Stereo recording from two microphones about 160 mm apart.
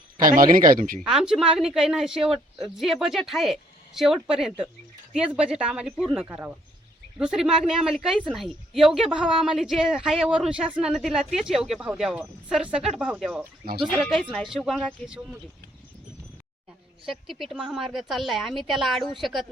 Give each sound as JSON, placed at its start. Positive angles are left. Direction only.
{"t": 0.2, "sound": "speech", "side_deg": -60}
{"t": 1.0, "sound": "speech", "side_deg": -5}
{"t": 17.1, "sound": "speech", "side_deg": 0}